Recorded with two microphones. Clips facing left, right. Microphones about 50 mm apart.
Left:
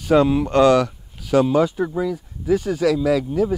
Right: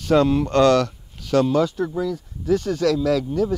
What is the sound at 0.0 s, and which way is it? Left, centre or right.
Speech, centre.